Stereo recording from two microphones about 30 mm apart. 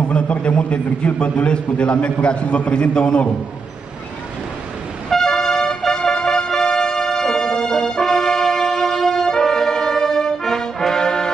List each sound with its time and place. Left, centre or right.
0.1 s a man's voice: left
5.1 s vehicle: centre
5.5 s music: centre
6.0 s music: left
6.5 s music: left
7.8 s brass instrument: left
8.1 s music: centre
9.6 s brass instrument: centre
10.4 s trombone: centre